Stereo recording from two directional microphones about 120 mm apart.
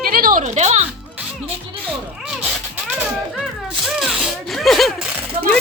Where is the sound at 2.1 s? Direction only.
10° right (ahead or behind).